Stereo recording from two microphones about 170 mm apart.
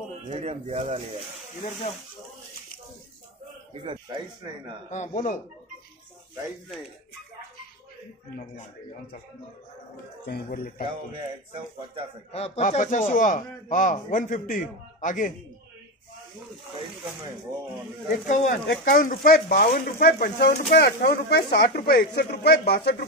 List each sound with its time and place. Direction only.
0.3 s speech: 40° right (ahead or behind)
3.8 s speech: 30° right (ahead or behind)
4.8 s a man's voice: 45° left (ahead or behind)
10.2 s speech: 65° left (ahead or behind)
12.3 s a man's voice: 35° left (ahead or behind)
18.2 s a man's voice: 50° left (ahead or behind); by 23.0 s 70° left (ahead or behind)